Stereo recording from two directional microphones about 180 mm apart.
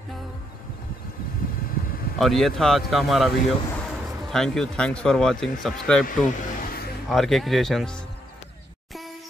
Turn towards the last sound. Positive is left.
turn(degrees=0)  # may be behind; listen again after turning